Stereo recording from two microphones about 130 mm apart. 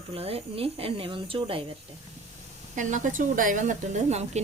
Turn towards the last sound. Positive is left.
turn(degrees=-60)  # may be behind; listen again after turning